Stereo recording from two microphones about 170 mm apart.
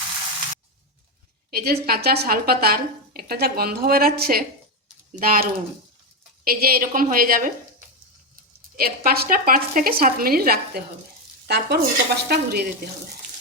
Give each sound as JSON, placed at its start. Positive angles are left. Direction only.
{"t": 1.5, "sound": "speech", "side_deg": -65}
{"t": 8.7, "sound": "speech", "side_deg": -60}
{"t": 11.4, "sound": "speech", "side_deg": -75}